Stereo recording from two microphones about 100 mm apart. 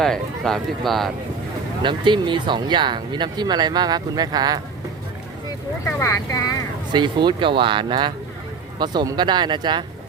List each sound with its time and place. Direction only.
0.0 s speech: 5° left (ahead or behind)
1.8 s speech: 50° right (ahead or behind)
5.8 s speech: 30° left (ahead or behind)
6.9 s speech: 50° right (ahead or behind)